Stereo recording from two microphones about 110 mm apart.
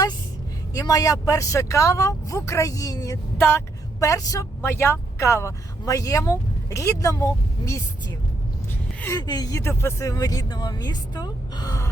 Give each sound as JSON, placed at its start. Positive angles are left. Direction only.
{"t": 0.7, "sound": "speech", "side_deg": 35}
{"t": 9.0, "sound": "speech", "side_deg": 35}